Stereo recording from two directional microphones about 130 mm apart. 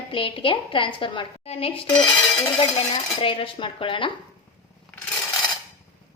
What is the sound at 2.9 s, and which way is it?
A woman's voice, 40° left (ahead or behind).